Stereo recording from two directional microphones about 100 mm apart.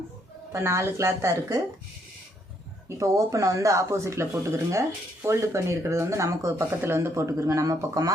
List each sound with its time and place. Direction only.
0.5 s speech: 25° right (ahead or behind)
3.0 s speech: 30° right (ahead or behind)